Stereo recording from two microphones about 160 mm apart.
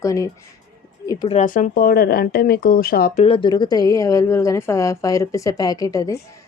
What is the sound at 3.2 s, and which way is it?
A woman's voice, 30° left (ahead or behind).